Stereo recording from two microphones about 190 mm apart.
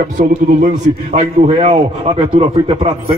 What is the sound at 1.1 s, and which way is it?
A man's voice, 35° right (ahead or behind).